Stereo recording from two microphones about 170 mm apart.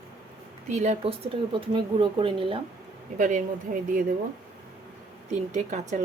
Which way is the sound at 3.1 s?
50° right (ahead or behind).